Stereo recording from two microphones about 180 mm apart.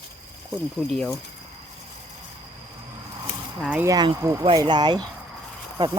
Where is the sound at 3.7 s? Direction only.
20° right (ahead or behind).